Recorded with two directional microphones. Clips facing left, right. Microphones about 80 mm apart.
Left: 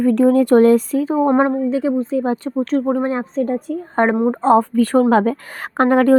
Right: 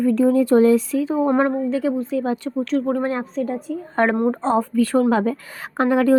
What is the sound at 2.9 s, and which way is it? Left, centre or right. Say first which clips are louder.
Speech: left 3 dB; centre.